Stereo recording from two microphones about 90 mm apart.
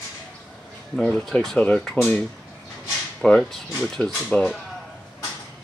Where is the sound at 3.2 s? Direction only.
5° left (ahead or behind).